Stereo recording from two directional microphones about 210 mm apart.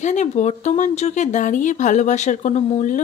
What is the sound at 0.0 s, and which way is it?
Speech, 35° left (ahead or behind).